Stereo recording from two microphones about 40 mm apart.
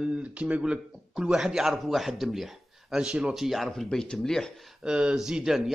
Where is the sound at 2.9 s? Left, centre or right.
Right.